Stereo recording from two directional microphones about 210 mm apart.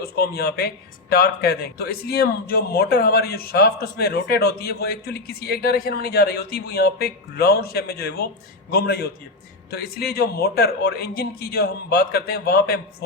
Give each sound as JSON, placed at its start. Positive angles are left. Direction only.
{"t": 0.0, "sound": "a man's voice", "side_deg": 50}